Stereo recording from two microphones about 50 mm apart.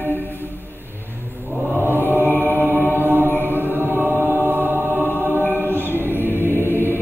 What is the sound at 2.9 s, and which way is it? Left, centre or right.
Chant, right.